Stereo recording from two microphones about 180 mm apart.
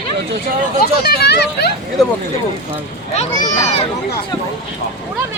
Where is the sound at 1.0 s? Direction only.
65° left (ahead or behind).